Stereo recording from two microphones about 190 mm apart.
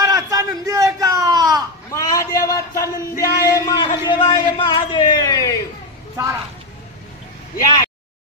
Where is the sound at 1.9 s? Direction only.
15° left (ahead or behind).